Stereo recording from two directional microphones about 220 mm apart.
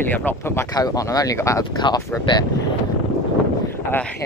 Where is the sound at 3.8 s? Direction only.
10° left (ahead or behind).